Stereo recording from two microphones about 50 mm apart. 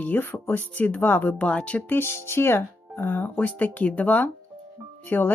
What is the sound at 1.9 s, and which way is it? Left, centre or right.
Speech, left.